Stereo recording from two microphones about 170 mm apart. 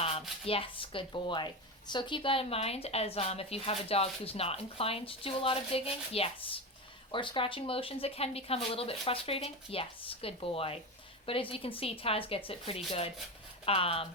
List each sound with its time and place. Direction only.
0.0 s a woman's voice: 35° left (ahead or behind)